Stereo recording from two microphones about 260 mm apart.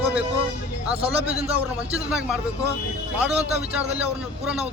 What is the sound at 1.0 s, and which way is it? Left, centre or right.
Speech, right.